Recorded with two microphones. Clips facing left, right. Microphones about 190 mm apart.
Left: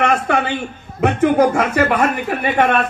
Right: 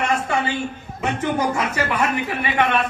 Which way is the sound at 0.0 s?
65° left (ahead or behind).